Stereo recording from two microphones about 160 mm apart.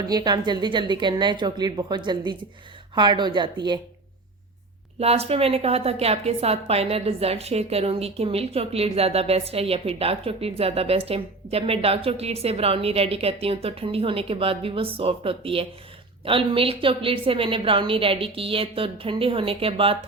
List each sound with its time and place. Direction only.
0.0 s a woman's voice: 25° right (ahead or behind)
4.9 s a woman's voice: 40° right (ahead or behind)